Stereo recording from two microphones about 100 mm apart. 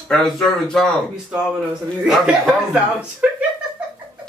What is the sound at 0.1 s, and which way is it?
Speech, 5° left (ahead or behind).